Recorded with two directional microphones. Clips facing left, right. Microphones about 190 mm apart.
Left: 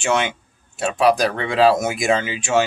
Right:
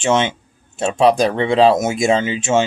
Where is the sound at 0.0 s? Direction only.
20° right (ahead or behind).